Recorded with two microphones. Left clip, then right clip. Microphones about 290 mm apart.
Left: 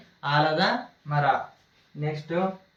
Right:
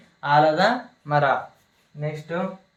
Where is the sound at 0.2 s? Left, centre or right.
Centre.